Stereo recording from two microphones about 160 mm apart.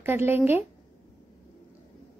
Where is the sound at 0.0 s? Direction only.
15° right (ahead or behind).